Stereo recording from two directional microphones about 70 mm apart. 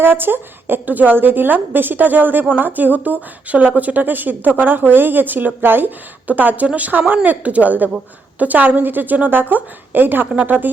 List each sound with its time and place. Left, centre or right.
0.0 s a woman's voice: right